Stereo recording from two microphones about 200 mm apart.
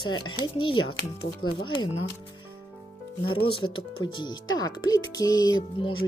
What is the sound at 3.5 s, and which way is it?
Speech, 25° left (ahead or behind).